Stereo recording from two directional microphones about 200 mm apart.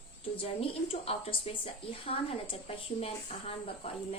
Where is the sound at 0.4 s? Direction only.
30° left (ahead or behind).